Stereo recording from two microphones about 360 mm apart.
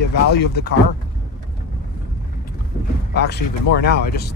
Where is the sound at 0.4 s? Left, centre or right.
Left.